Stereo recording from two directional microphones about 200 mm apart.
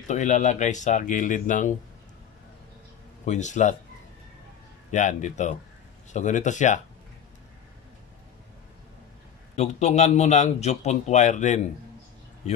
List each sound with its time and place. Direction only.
0.1 s a man's voice: 35° left (ahead or behind)
3.3 s a man's voice: 35° left (ahead or behind)
4.9 s a man's voice: 35° left (ahead or behind)
9.6 s a man's voice: 35° left (ahead or behind)